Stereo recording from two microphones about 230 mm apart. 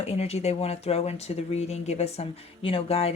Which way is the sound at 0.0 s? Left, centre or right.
Left.